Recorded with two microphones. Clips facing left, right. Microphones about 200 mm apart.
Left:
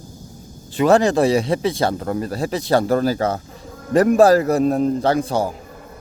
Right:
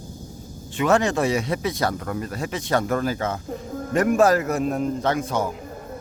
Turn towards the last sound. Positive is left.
turn(degrees=35)  # may be behind; listen again after turning